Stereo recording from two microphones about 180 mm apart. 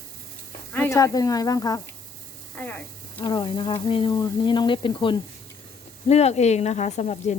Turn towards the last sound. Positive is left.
turn(degrees=40)  # may be behind; listen again after turning